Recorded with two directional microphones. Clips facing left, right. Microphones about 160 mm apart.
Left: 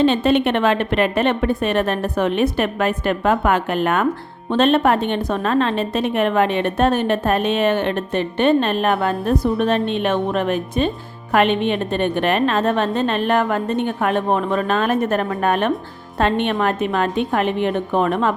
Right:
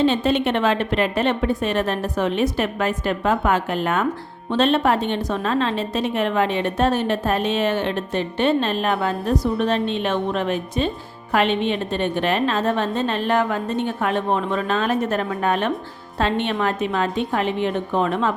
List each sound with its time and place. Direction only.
0.0 s a woman's voice: 60° left (ahead or behind)